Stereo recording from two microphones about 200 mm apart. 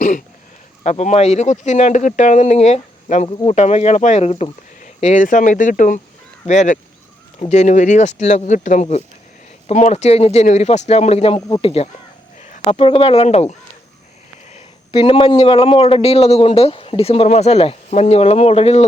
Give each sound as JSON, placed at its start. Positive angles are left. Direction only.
{"t": 0.9, "sound": "a man's voice", "side_deg": 35}
{"t": 15.0, "sound": "a man's voice", "side_deg": 25}